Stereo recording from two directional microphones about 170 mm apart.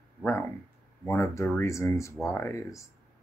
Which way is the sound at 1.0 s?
15° left (ahead or behind).